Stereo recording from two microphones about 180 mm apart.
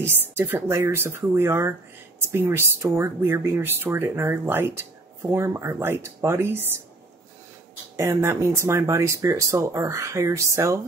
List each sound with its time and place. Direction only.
0.0 s speech: 10° right (ahead or behind)
7.9 s speech: 15° right (ahead or behind)